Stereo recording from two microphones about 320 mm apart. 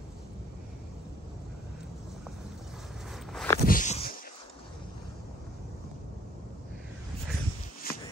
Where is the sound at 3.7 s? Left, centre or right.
Left.